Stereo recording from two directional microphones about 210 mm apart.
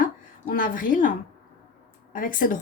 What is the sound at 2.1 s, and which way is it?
Speech, 40° left (ahead or behind).